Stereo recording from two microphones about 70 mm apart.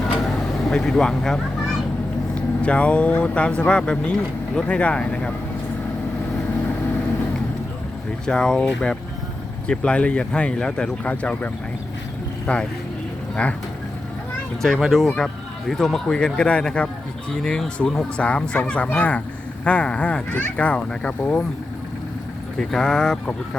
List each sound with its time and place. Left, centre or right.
0.6 s speech: centre
8.3 s speech: centre
14.6 s speech: centre
22.5 s speech: centre